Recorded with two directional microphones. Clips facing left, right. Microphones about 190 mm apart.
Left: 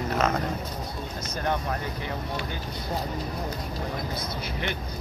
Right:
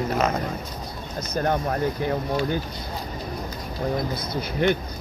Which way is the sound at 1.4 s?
45° right (ahead or behind).